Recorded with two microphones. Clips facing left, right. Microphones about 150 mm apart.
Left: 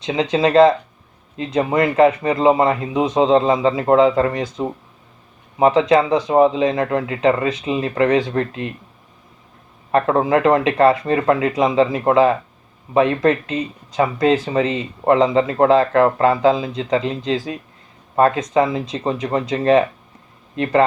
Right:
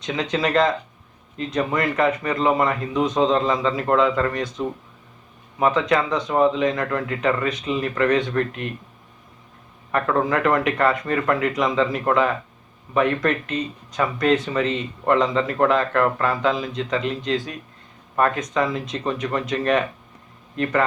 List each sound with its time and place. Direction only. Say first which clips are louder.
0.0 s speech: left 6 dB; 25° left (ahead or behind)
9.9 s speech: left 5 dB; 25° left (ahead or behind)